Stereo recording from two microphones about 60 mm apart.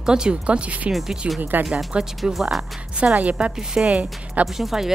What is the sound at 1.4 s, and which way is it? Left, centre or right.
Speech, right.